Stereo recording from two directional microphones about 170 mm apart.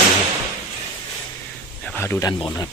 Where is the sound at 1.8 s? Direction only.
10° left (ahead or behind).